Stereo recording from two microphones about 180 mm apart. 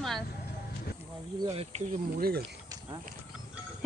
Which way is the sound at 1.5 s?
35° right (ahead or behind).